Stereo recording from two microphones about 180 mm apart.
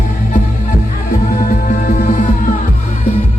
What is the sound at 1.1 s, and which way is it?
Music, 55° left (ahead or behind).